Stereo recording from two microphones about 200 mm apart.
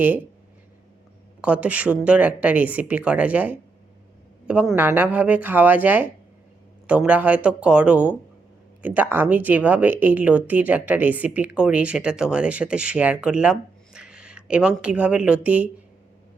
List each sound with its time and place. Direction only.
1.4 s speech: 5° right (ahead or behind)